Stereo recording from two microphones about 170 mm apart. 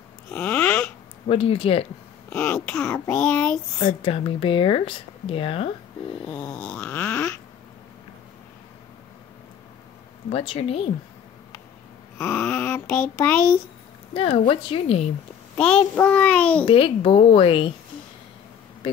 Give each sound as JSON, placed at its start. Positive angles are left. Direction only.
{"t": 0.3, "sound": "a sound", "side_deg": 10}
{"t": 1.3, "sound": "speech", "side_deg": 35}
{"t": 2.2, "sound": "speech", "side_deg": 10}
{"t": 3.8, "sound": "speech", "side_deg": 30}
{"t": 6.3, "sound": "a sound", "side_deg": 5}
{"t": 10.3, "sound": "speech", "side_deg": 35}
{"t": 12.2, "sound": "speech", "side_deg": 10}
{"t": 14.1, "sound": "speech", "side_deg": 35}
{"t": 15.5, "sound": "speech", "side_deg": 5}
{"t": 16.6, "sound": "speech", "side_deg": 30}